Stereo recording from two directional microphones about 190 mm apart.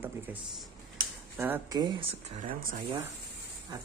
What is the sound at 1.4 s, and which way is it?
Speech, 15° right (ahead or behind).